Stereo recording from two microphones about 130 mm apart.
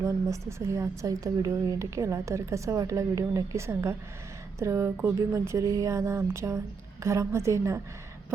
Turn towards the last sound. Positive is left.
turn(degrees=-25)  # may be behind; listen again after turning